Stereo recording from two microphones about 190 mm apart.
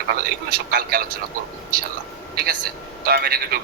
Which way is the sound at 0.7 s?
55° right (ahead or behind).